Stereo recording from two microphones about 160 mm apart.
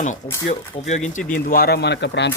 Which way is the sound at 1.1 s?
60° left (ahead or behind).